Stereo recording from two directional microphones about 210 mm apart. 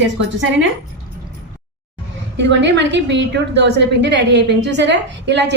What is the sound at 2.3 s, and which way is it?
A woman's voice, 55° right (ahead or behind).